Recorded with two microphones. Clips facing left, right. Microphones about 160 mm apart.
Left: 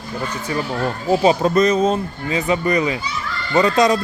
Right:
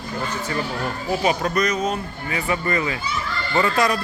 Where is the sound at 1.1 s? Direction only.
25° left (ahead or behind).